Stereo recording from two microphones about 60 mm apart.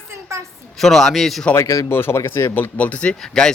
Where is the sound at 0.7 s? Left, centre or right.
Centre.